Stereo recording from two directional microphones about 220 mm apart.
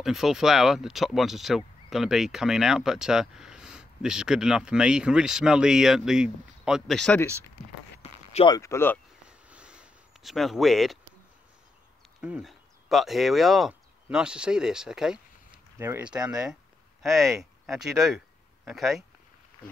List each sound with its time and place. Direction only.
0.0 s speech: centre (ahead or behind)
8.0 s zipper: 30° left (ahead or behind)
8.5 s speech: 10° left (ahead or behind)
9.5 s a sound: 5° right (ahead or behind)
12.2 s speech: 5° right (ahead or behind)